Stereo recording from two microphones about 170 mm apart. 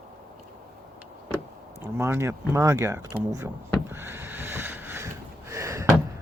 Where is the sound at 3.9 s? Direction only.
15° right (ahead or behind).